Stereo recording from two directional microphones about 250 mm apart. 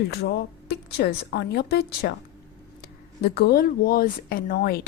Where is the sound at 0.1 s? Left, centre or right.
Left.